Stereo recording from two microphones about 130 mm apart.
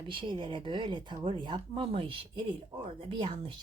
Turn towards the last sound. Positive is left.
turn(degrees=-40)  # may be behind; listen again after turning